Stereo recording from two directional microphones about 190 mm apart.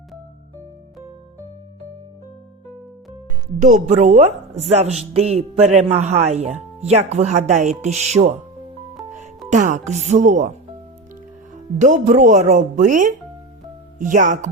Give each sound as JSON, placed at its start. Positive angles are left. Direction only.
{"t": 3.6, "sound": "a woman's voice", "side_deg": -40}
{"t": 9.5, "sound": "a woman's voice", "side_deg": -40}
{"t": 11.8, "sound": "a woman's voice", "side_deg": -40}